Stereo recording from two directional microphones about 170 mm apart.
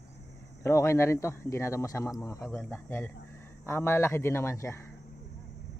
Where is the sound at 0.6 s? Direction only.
15° left (ahead or behind).